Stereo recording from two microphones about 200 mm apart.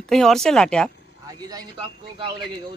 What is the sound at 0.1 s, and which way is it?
Speech, centre (ahead or behind).